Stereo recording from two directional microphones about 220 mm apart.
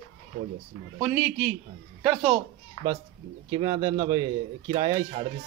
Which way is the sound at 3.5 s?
20° right (ahead or behind).